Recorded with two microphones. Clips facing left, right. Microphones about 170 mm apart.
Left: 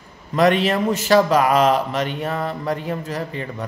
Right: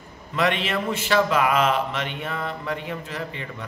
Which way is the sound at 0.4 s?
40° left (ahead or behind).